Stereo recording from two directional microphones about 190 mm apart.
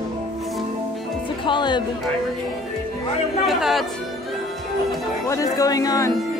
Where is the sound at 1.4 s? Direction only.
25° left (ahead or behind).